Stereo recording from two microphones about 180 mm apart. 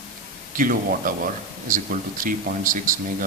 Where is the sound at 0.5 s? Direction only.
50° right (ahead or behind).